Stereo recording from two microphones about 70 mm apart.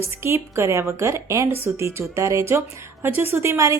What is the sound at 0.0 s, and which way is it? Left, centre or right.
A woman's voice, right.